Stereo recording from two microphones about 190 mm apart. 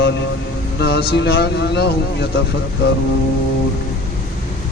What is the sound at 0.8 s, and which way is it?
Speech, 65° left (ahead or behind).